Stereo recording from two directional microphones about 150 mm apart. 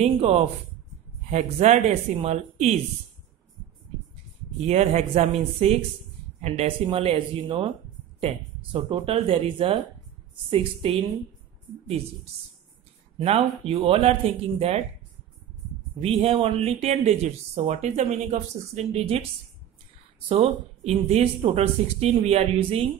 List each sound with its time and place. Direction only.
0.0 s speech: 40° right (ahead or behind)
4.6 s speech: 45° right (ahead or behind)
13.2 s speech: 40° right (ahead or behind)
16.0 s speech: 40° right (ahead or behind)
20.2 s speech: 40° right (ahead or behind)